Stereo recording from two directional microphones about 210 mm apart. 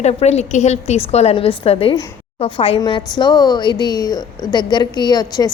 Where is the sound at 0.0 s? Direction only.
30° left (ahead or behind).